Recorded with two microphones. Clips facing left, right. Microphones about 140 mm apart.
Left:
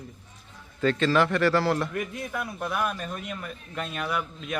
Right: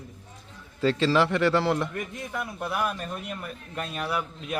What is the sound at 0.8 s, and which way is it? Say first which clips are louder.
Speech: even; 25° right (ahead or behind).